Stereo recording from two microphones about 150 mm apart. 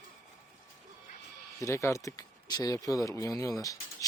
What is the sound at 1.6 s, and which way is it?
Speech, 20° left (ahead or behind).